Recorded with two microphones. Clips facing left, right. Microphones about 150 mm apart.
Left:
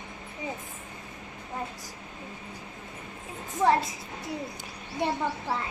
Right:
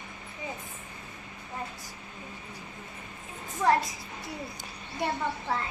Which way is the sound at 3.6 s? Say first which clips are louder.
Left 1 dB; 25° left (ahead or behind).